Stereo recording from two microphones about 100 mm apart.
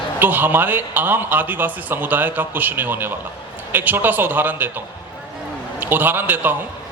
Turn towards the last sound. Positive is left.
turn(degrees=-20)  # may be behind; listen again after turning